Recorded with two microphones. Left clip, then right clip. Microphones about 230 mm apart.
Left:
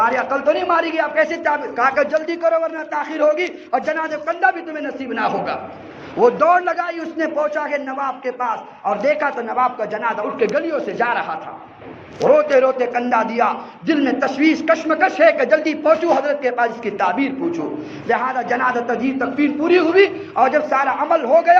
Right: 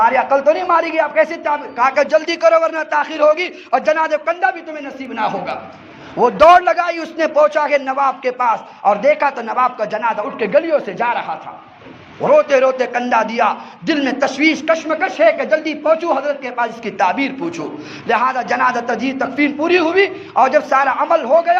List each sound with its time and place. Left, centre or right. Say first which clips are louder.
0.0 s a man's voice: right 4 dB; right
6.1 s a man's voice: right 5 dB; right